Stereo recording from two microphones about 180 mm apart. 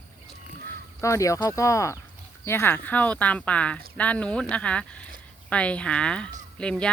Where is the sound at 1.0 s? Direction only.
15° left (ahead or behind).